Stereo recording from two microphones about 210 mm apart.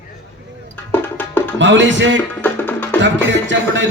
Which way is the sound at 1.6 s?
60° right (ahead or behind).